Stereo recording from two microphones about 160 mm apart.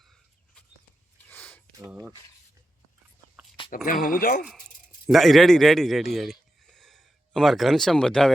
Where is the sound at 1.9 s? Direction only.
5° right (ahead or behind).